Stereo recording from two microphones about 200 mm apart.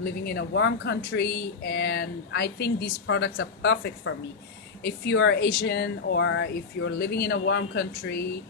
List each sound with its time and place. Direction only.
0.0 s speech: 50° left (ahead or behind)